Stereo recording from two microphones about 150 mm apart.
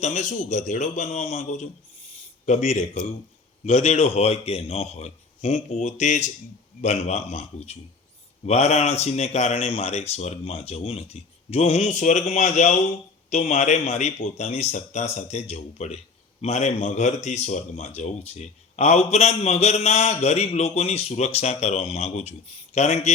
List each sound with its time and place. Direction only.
0.0 s speech: 50° left (ahead or behind)
2.6 s speech: 55° left (ahead or behind)